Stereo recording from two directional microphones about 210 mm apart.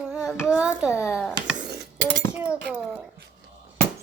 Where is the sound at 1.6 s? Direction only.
55° right (ahead or behind).